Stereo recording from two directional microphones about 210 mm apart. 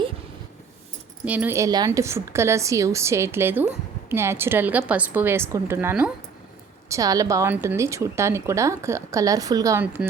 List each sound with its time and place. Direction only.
1.2 s a woman's voice: 5° right (ahead or behind)